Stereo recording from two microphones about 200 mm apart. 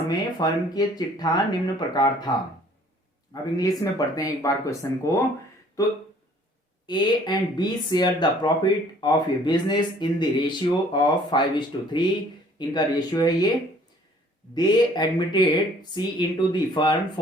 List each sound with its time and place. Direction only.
0.1 s speech: 20° left (ahead or behind)
3.6 s speech: 20° left (ahead or behind)
14.5 s speech: 20° left (ahead or behind)